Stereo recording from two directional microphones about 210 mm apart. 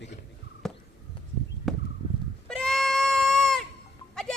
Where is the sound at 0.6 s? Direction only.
Centre (ahead or behind).